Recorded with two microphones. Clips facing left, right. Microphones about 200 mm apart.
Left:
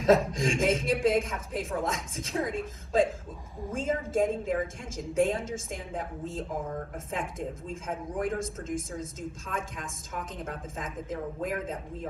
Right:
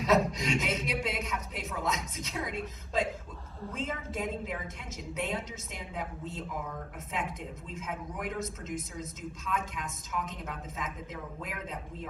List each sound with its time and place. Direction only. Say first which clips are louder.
0.0 s a woman's voice: left 4 dB; 50° left (ahead or behind)
3.8 s a woman's voice: left 9 dB; 45° left (ahead or behind)